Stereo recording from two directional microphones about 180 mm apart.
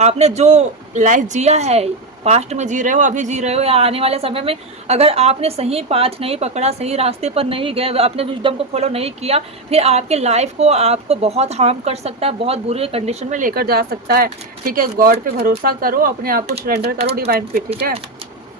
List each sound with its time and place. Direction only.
0.0 s a woman's voice: 35° right (ahead or behind); by 17.6 s 55° right (ahead or behind)